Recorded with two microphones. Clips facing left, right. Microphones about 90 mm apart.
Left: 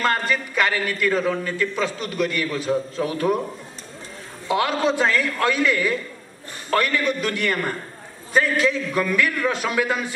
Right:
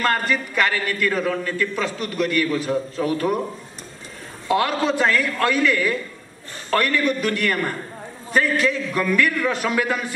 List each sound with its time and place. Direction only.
0.0 s a man's voice: centre (ahead or behind)
4.5 s a man's voice: 5° left (ahead or behind)